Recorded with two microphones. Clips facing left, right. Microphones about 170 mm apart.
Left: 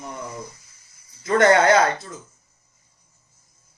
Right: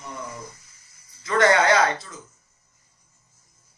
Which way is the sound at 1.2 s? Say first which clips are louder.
Left 3 dB; 50° left (ahead or behind).